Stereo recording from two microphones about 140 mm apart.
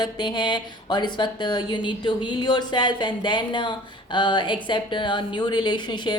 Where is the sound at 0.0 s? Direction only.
30° left (ahead or behind).